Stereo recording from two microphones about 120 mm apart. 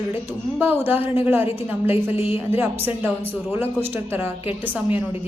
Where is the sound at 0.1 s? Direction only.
15° right (ahead or behind).